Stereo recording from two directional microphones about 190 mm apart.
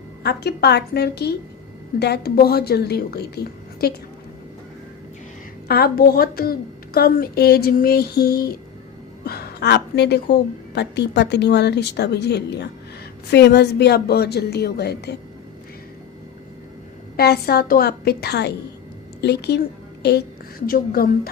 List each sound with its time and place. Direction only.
0.2 s speech: 60° left (ahead or behind)
5.6 s a woman's voice: 55° left (ahead or behind)
9.2 s a sound: 55° left (ahead or behind)
10.8 s speech: 60° left (ahead or behind)
17.2 s a woman's voice: 55° left (ahead or behind)